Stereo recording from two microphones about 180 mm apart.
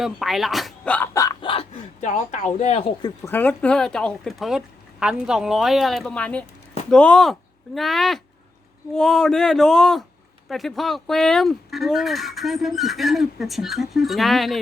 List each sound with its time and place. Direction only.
0.0 s speech: centre (ahead or behind); by 1.6 s 25° left (ahead or behind)
2.0 s speech: 40° left (ahead or behind)
3.0 s speech: 10° left (ahead or behind)